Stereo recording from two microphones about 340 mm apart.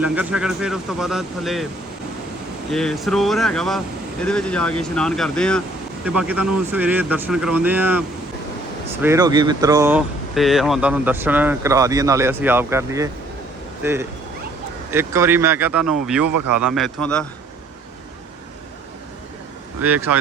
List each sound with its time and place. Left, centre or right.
0.0 s speech: centre
2.7 s speech: centre
16.2 s speech: right
16.6 s speech: centre
19.8 s speech: centre